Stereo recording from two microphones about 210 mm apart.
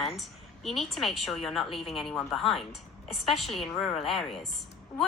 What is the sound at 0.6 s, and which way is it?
A woman's voice, centre (ahead or behind).